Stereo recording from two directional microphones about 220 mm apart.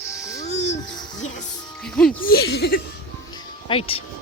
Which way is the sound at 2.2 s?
45° left (ahead or behind).